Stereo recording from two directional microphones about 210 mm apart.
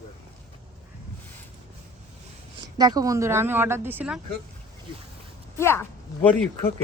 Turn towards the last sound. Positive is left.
turn(degrees=10)  # may be behind; listen again after turning